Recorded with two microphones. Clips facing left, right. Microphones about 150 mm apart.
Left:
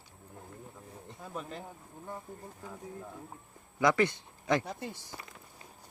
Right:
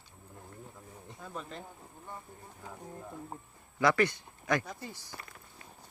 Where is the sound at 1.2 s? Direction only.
5° left (ahead or behind).